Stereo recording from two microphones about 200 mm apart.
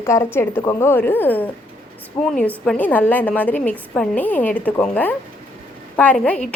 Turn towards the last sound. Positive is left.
turn(degrees=5)  # may be behind; listen again after turning